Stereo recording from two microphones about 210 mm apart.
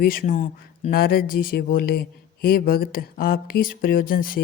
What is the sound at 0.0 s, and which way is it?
Speech, 40° left (ahead or behind).